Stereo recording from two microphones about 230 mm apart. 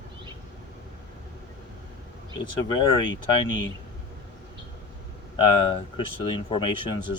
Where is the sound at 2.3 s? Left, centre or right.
Centre.